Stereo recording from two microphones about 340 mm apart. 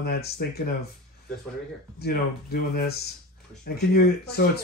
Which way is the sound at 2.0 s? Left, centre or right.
Left.